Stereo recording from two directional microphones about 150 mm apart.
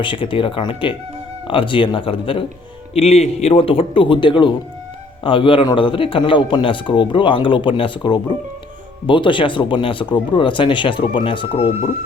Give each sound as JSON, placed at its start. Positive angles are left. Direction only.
{"t": 0.0, "sound": "speech", "side_deg": 35}